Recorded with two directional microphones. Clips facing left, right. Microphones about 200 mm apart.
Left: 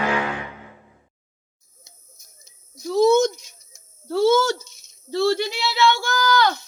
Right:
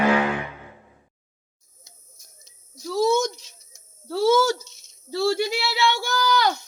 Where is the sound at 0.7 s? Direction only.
20° right (ahead or behind).